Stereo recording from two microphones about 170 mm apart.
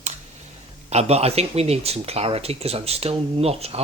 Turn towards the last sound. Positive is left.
turn(degrees=-35)  # may be behind; listen again after turning